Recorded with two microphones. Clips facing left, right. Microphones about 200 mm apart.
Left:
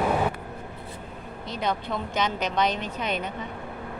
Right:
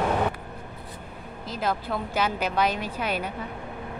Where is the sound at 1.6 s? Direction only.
5° right (ahead or behind).